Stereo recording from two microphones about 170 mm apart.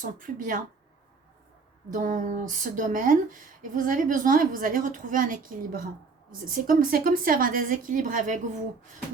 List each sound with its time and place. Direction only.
0.0 s speech: 50° right (ahead or behind)
1.9 s speech: 50° right (ahead or behind)